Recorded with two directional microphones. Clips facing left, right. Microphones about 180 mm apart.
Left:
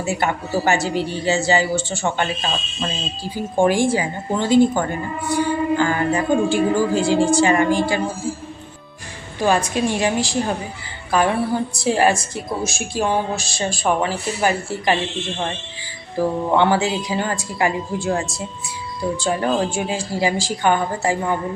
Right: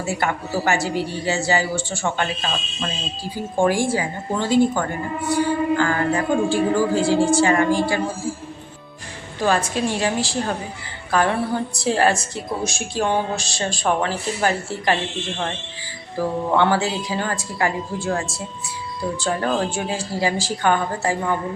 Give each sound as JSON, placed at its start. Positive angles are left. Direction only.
{"t": 0.0, "sound": "a woman's voice", "side_deg": 20}
{"t": 3.6, "sound": "a woman's voice", "side_deg": 20}
{"t": 9.4, "sound": "a woman's voice", "side_deg": 15}
{"t": 16.5, "sound": "a woman's voice", "side_deg": 15}